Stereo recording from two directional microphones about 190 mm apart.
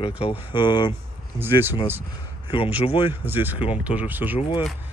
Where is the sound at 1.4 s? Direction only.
10° right (ahead or behind).